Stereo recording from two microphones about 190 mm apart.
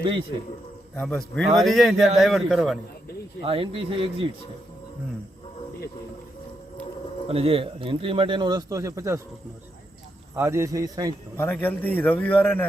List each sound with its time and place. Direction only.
0.0 s a man's voice: 25° right (ahead or behind)
0.9 s a man's voice: 5° left (ahead or behind)
3.4 s a man's voice: 30° right (ahead or behind)
7.3 s a man's voice: 30° right (ahead or behind)
10.3 s speech: 15° right (ahead or behind)
11.3 s a man's voice: 10° left (ahead or behind)